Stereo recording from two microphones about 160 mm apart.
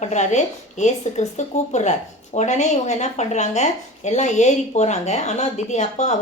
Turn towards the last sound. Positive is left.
turn(degrees=50)  # may be behind; listen again after turning